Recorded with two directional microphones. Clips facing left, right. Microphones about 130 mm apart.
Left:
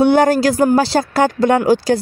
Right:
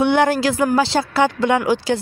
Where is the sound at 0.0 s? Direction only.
40° left (ahead or behind).